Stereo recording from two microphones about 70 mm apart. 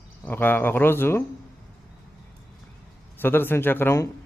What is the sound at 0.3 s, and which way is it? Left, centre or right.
Speech, left.